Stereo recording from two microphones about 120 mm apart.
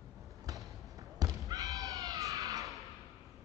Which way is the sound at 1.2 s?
30° right (ahead or behind).